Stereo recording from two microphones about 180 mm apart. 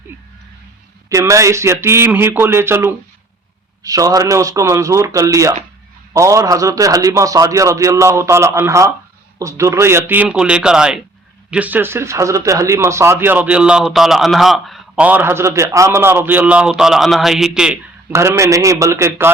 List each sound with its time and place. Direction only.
1.1 s speech: 15° right (ahead or behind)
18.1 s speech: 15° right (ahead or behind)